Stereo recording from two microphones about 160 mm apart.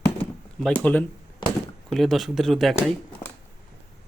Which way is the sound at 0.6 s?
5° left (ahead or behind).